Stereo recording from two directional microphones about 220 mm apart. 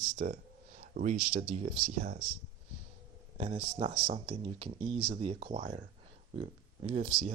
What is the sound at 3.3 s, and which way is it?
Speech, 25° right (ahead or behind).